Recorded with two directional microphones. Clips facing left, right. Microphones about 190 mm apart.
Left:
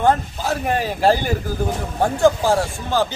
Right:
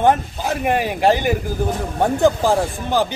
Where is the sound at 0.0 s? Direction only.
15° right (ahead or behind).